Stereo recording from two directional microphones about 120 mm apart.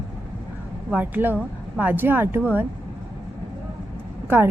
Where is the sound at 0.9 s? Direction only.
15° right (ahead or behind).